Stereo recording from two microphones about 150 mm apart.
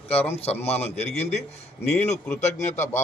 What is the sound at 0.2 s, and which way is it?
Speech, 45° left (ahead or behind).